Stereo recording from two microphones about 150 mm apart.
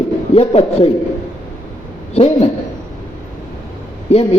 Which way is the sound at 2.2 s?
45° left (ahead or behind).